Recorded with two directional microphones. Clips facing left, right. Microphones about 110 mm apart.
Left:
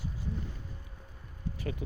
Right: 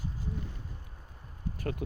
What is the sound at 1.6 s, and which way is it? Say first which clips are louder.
Speech: right 3 dB; 55° right (ahead or behind).